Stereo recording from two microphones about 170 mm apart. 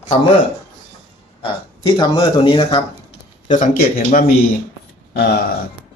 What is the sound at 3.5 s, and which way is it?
Speech, 45° left (ahead or behind).